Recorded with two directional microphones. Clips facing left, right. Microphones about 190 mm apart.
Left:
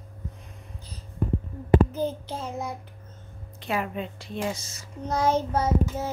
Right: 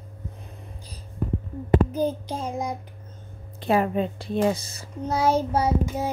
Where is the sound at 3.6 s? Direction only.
35° right (ahead or behind).